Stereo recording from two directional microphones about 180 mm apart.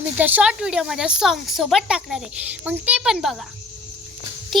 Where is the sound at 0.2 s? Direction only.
10° right (ahead or behind).